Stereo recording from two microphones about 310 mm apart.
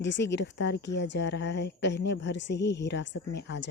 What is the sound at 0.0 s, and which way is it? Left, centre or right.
A woman's voice, left.